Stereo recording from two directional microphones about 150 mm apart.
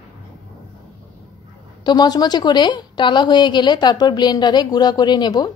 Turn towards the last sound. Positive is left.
turn(degrees=30)  # may be behind; listen again after turning